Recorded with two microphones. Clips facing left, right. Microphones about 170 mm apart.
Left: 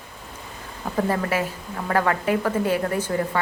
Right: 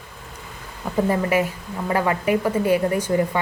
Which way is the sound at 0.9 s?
15° right (ahead or behind).